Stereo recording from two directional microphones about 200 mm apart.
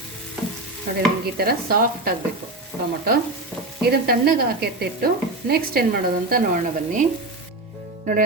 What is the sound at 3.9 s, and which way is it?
A woman's voice, 50° right (ahead or behind).